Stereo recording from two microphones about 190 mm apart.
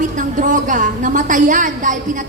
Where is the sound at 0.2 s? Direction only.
40° right (ahead or behind).